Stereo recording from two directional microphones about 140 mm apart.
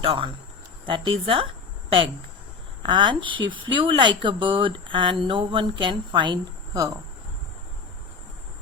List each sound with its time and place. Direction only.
0.0 s speech: 40° right (ahead or behind)